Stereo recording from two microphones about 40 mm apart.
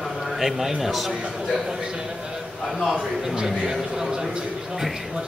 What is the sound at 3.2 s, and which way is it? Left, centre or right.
A man's voice, centre.